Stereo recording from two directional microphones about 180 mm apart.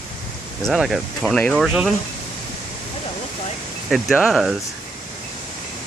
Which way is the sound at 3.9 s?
Centre (ahead or behind).